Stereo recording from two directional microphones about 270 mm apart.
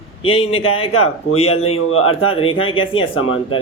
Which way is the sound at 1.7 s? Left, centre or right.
Left.